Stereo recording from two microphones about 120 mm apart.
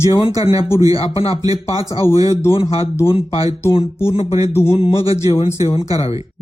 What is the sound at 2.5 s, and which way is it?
Speech, 50° left (ahead or behind).